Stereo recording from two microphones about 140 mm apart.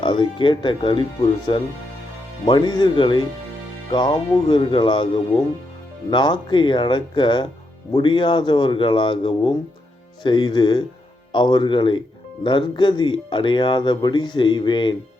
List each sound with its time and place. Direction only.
0.0 s speech: 35° left (ahead or behind)